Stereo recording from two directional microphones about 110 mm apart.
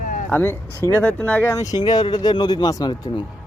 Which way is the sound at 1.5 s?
35° left (ahead or behind).